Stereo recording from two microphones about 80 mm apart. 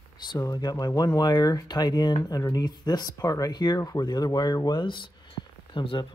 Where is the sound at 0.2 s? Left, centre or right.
Left.